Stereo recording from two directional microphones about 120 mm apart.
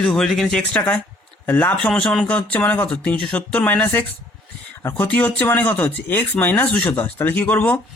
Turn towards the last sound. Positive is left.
turn(degrees=15)  # may be behind; listen again after turning